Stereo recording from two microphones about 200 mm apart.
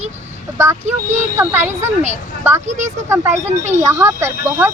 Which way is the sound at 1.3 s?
10° right (ahead or behind).